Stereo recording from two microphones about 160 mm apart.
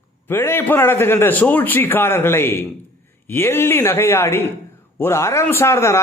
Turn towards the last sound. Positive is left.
turn(degrees=15)  # may be behind; listen again after turning